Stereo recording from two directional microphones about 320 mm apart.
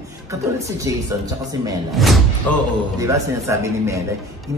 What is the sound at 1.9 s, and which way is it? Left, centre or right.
A man's voice, centre.